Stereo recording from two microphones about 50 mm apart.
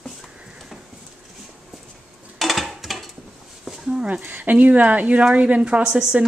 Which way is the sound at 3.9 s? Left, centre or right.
Right.